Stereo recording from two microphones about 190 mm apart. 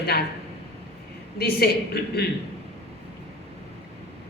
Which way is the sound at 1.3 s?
55° left (ahead or behind).